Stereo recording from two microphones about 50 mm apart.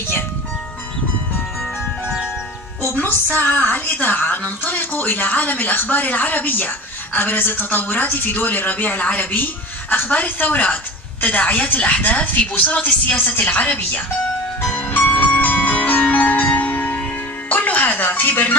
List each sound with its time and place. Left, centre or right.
2.9 s a woman's voice: left
14.7 s music: left